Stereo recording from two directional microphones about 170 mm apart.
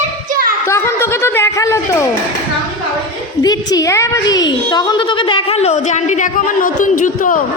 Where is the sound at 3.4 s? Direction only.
20° left (ahead or behind); by 7.4 s 50° left (ahead or behind).